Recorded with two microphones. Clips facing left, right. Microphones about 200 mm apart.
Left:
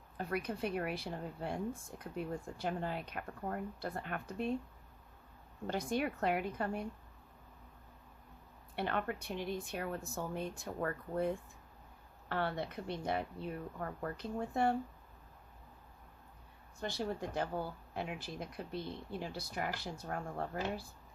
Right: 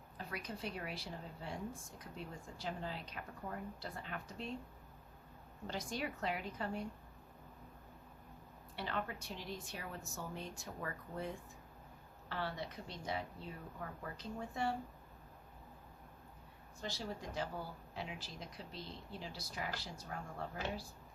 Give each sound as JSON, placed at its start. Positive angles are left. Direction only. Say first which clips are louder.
{"t": 0.2, "sound": "speech", "louder": "left 8 dB", "side_deg": 55}
{"t": 5.6, "sound": "speech", "louder": "left 7 dB", "side_deg": 55}
{"t": 8.7, "sound": "speech", "louder": "left 5 dB", "side_deg": 55}
{"t": 16.8, "sound": "speech", "louder": "left 6 dB", "side_deg": 55}